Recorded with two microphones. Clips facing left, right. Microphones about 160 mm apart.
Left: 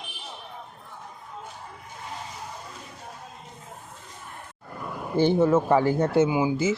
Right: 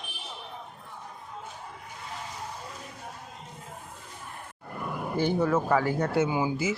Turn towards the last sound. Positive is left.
turn(degrees=15)  # may be behind; listen again after turning